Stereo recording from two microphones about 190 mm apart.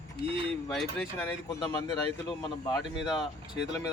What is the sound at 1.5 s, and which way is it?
Speech, 20° left (ahead or behind).